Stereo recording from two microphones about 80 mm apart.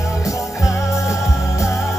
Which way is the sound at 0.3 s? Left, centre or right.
Left.